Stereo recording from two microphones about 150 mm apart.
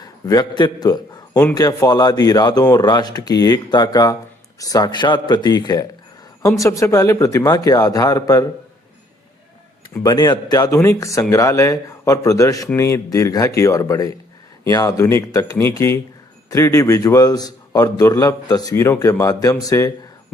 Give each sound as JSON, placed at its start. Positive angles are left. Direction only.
{"t": 0.0, "sound": "a man's voice", "side_deg": 25}
{"t": 9.9, "sound": "a man's voice", "side_deg": 25}